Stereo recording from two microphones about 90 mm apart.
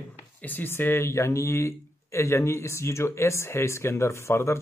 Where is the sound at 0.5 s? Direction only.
20° left (ahead or behind).